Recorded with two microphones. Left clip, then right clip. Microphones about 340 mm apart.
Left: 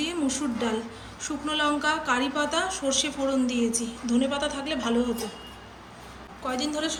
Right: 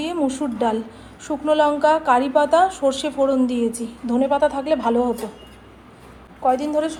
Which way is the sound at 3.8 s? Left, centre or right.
Right.